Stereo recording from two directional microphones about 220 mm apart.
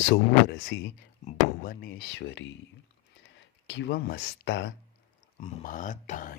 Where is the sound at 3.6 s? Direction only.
55° left (ahead or behind).